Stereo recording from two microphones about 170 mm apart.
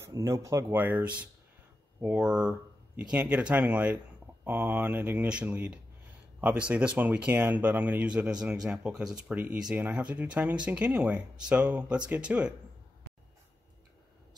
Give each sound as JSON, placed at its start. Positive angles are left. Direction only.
{"t": 0.1, "sound": "speech", "side_deg": -20}